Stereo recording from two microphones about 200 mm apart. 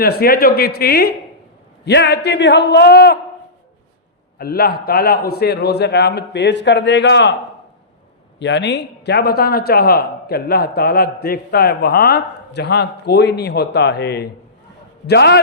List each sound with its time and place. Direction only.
0.0 s a man's voice: 50° left (ahead or behind)
4.4 s a man's voice: 50° left (ahead or behind)
8.4 s a man's voice: 60° left (ahead or behind)